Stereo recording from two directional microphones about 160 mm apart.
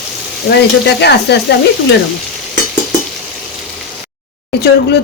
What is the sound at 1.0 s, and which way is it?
Speech, 90° left.